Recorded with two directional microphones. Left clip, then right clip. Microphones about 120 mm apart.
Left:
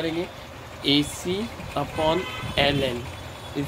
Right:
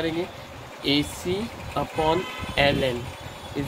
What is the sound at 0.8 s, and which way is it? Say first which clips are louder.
Speech: left 1 dB; 25° left (ahead or behind).